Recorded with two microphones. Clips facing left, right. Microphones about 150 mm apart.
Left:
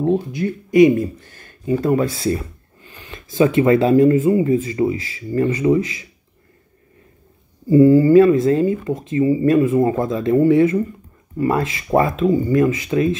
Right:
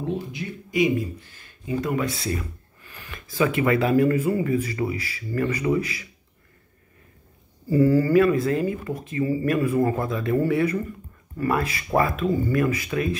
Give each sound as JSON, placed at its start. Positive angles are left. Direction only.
{"t": 0.0, "sound": "speech", "side_deg": 50}
{"t": 1.8, "sound": "speech", "side_deg": 35}
{"t": 7.7, "sound": "speech", "side_deg": 20}